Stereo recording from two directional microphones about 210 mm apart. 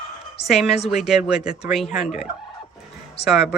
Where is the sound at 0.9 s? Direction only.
Centre (ahead or behind).